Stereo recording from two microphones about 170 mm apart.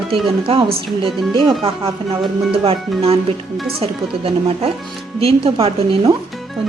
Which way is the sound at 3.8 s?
35° right (ahead or behind).